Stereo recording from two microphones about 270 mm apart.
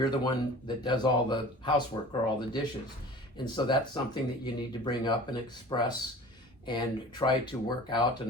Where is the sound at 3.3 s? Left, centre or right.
Centre.